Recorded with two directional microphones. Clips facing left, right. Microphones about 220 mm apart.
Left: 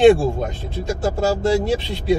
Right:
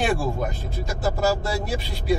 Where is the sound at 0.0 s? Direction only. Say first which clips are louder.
Left 11 dB; 25° left (ahead or behind).